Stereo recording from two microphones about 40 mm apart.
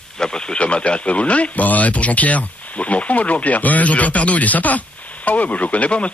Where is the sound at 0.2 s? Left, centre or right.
Centre.